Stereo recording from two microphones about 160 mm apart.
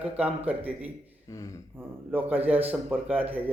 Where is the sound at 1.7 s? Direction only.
10° right (ahead or behind).